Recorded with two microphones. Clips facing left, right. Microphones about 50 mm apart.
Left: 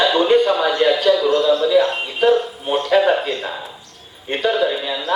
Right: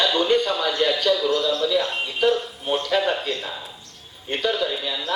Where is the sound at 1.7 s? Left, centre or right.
Centre.